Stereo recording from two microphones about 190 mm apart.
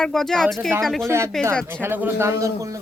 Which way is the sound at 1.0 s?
15° right (ahead or behind).